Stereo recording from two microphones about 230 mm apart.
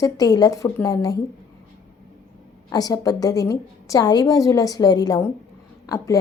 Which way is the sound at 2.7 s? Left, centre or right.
Centre.